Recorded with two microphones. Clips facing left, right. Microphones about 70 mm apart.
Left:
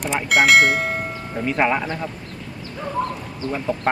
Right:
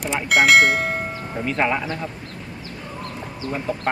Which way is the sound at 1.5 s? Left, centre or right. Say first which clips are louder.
Left 2 dB; centre.